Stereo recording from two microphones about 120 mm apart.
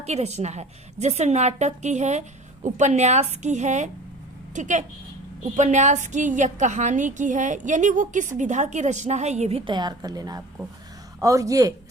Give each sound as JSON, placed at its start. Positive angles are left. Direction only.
{"t": 0.0, "sound": "a woman's voice", "side_deg": -65}
{"t": 2.6, "sound": "a woman's voice", "side_deg": -85}
{"t": 9.6, "sound": "a woman's voice", "side_deg": -35}